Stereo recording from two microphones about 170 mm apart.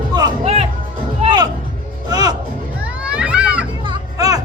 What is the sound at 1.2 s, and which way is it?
Music, 25° right (ahead or behind).